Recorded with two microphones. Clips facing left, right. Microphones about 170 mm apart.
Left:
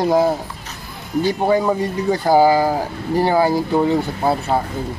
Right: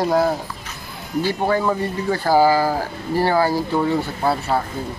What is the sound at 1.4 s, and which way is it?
Speech, 20° left (ahead or behind).